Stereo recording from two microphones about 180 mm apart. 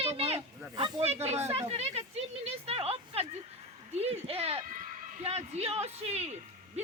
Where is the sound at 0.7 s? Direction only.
25° right (ahead or behind).